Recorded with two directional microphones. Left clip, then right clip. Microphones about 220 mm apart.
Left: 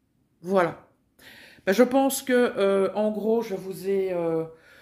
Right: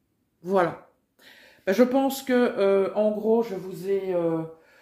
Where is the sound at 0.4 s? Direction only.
30° left (ahead or behind); by 4.3 s 50° left (ahead or behind).